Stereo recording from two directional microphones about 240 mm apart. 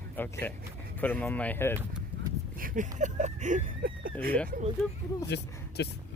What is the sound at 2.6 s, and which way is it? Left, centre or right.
Speech, right.